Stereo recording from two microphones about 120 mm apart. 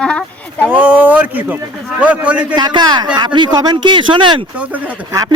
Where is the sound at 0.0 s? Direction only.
5° left (ahead or behind).